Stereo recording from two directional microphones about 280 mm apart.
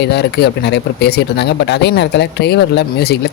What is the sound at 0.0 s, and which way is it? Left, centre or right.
Speech, left.